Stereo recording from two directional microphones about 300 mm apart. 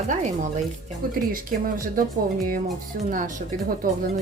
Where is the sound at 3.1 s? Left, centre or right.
Right.